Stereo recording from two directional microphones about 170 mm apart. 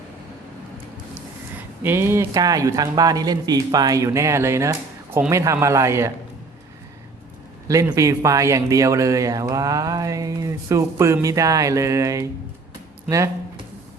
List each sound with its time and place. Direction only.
1.5 s a man's voice: 15° right (ahead or behind)
7.9 s speech: 15° right (ahead or behind)